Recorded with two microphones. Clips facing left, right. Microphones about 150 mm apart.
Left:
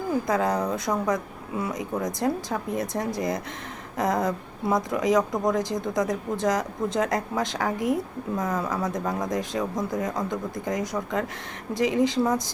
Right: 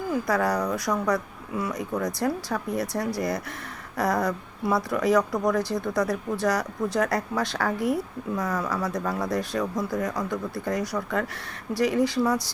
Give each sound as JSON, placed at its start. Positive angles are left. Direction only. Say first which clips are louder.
{"t": 0.3, "sound": "speech", "louder": "right 1 dB", "side_deg": 20}